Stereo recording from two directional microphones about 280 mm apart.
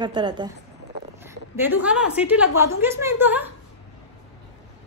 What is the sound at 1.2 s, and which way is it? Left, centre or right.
A woman's voice, centre.